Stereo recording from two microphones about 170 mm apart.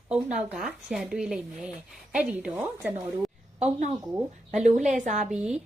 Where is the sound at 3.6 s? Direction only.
45° right (ahead or behind).